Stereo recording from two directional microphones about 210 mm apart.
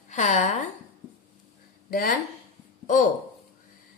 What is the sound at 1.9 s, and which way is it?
Speech, 40° left (ahead or behind).